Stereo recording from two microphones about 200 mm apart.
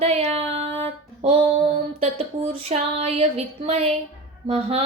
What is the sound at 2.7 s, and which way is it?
Speech, 30° right (ahead or behind).